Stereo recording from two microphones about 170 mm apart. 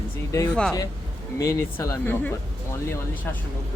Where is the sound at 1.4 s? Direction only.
20° left (ahead or behind).